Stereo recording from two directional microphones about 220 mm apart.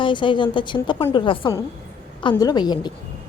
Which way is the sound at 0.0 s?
20° left (ahead or behind).